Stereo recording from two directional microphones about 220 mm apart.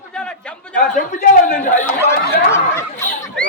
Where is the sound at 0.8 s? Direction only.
40° left (ahead or behind).